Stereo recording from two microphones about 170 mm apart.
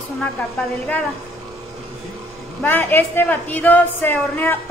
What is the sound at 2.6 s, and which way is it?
A woman's voice, 10° left (ahead or behind).